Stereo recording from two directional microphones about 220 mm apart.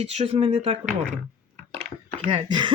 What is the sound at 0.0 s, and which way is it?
Speech, 25° right (ahead or behind).